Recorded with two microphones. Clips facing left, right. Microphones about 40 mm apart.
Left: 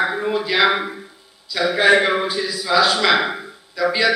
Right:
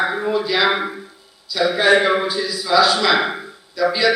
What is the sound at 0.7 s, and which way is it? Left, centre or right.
Speech, centre.